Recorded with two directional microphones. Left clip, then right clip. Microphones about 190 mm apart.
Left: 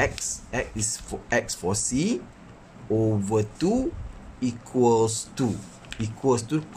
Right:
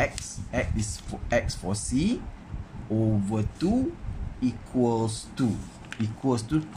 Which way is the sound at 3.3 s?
30° left (ahead or behind).